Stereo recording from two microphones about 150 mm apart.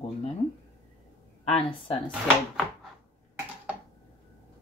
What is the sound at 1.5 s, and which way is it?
Speech, 40° left (ahead or behind).